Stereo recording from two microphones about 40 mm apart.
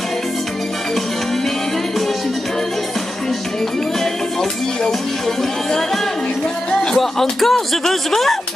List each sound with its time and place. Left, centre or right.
6.7 s music: left
7.0 s speech: centre